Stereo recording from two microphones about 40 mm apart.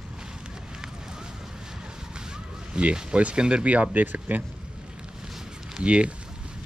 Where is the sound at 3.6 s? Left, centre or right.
Right.